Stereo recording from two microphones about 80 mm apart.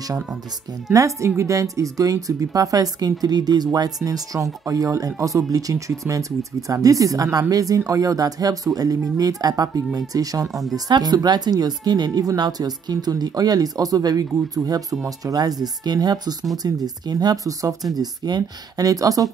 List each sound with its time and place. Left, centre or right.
0.9 s speech: right
10.5 s speech: centre
10.9 s speech: right
17.9 s speech: right